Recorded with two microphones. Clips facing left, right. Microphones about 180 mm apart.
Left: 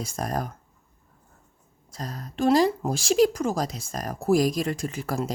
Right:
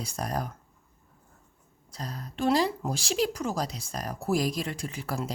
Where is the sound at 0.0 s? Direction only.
45° left (ahead or behind).